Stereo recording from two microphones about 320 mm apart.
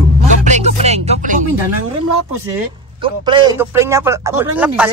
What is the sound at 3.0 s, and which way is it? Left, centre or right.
Speech, centre.